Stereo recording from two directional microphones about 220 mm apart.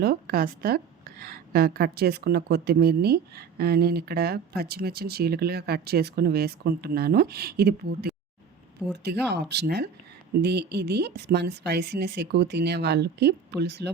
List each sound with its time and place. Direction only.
0.0 s a woman's voice: 45° right (ahead or behind)